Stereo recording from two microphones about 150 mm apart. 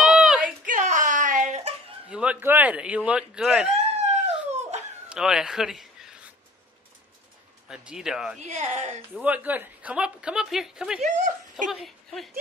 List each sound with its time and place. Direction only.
0.0 s a sound: 5° right (ahead or behind)
0.7 s a sound: 60° right (ahead or behind)
2.0 s a woman's voice: 10° right (ahead or behind)
4.5 s dog: 50° right (ahead or behind)
5.1 s a sound: 5° right (ahead or behind)
7.6 s speech: 5° right (ahead or behind)
8.4 s speech: 50° right (ahead or behind)
9.2 s a woman's voice: 10° right (ahead or behind)
11.0 s speech: 50° right (ahead or behind)
11.7 s speech: centre (ahead or behind)